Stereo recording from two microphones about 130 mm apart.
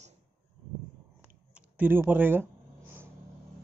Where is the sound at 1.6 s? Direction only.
15° right (ahead or behind).